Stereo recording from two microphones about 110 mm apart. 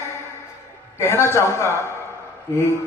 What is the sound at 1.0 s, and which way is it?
Speech, 25° left (ahead or behind).